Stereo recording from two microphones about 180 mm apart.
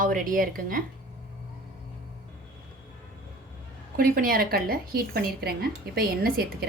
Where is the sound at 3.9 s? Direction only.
55° right (ahead or behind).